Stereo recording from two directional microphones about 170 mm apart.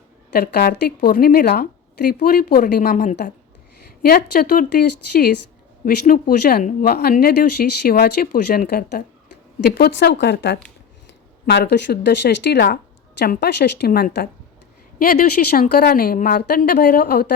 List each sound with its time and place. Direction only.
0.3 s speech: 60° left (ahead or behind)
5.8 s speech: 55° left (ahead or behind); by 12.6 s 85° left
12.6 s speech: 65° left (ahead or behind)